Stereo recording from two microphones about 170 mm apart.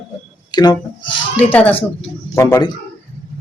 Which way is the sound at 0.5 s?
25° left (ahead or behind).